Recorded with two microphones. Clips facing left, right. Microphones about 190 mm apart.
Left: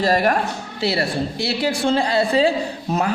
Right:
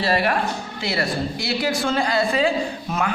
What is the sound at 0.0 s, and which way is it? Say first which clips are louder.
Speech: left 3 dB; 45° left (ahead or behind).